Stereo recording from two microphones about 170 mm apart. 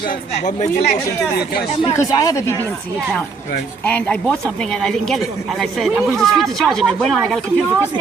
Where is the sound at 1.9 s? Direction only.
20° left (ahead or behind).